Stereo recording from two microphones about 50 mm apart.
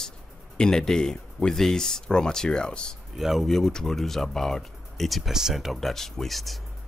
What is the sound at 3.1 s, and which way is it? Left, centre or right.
Speech, centre.